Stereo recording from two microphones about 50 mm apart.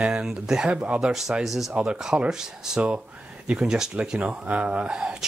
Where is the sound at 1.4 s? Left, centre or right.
Centre.